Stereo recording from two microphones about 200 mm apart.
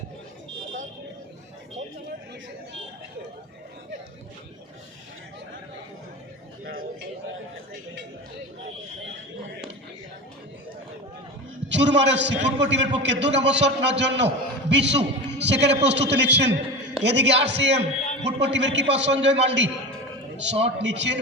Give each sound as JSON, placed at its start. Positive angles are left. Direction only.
{"t": 11.7, "sound": "a man's voice", "side_deg": -60}